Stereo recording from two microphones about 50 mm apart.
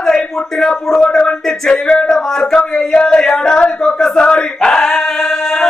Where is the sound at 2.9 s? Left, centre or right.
Centre.